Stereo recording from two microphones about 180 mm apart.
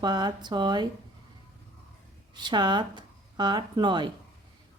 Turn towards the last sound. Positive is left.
turn(degrees=-25)  # may be behind; listen again after turning